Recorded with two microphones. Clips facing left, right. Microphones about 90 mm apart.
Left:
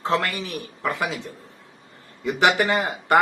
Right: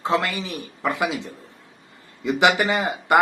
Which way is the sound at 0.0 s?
15° right (ahead or behind).